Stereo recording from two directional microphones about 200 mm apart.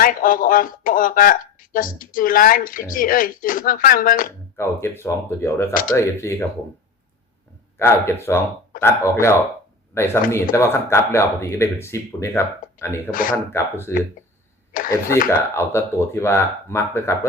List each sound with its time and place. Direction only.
0.0 s speech: 45° left (ahead or behind)
4.5 s speech: 10° left (ahead or behind)
7.8 s speech: 10° left (ahead or behind)
13.1 s speech: 45° left (ahead or behind)
13.3 s speech: 15° left (ahead or behind)
14.7 s speech: 45° left (ahead or behind)
15.3 s speech: 15° left (ahead or behind)